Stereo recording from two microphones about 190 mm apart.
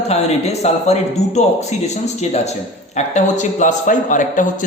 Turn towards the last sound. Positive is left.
turn(degrees=40)  # may be behind; listen again after turning